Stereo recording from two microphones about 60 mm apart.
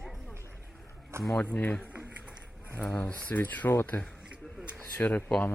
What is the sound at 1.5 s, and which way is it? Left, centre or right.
Speech, left.